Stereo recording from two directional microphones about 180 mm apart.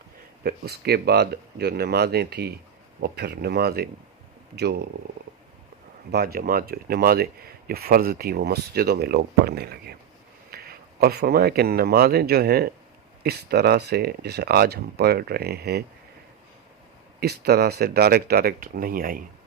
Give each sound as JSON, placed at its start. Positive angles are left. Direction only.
{"t": 0.4, "sound": "speech", "side_deg": -60}
{"t": 6.1, "sound": "speech", "side_deg": -60}
{"t": 17.2, "sound": "speech", "side_deg": -65}